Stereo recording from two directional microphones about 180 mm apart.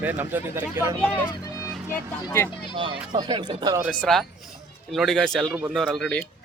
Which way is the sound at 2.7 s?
30° right (ahead or behind).